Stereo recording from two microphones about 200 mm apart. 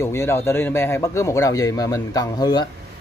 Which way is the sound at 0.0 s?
15° left (ahead or behind).